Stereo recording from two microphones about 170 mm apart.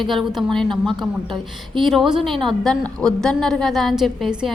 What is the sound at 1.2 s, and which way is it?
Speech, 30° right (ahead or behind).